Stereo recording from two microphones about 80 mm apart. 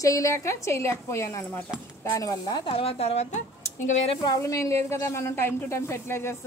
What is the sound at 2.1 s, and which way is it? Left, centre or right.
Speech, left.